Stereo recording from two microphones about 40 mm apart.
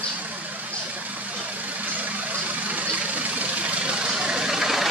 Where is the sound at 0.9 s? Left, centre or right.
Right.